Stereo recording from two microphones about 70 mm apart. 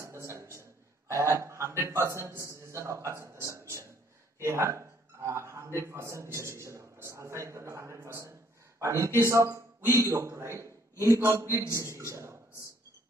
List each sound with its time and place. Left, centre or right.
0.0 s a sound: right
2.2 s a man's voice: right
12.1 s beatboxing: right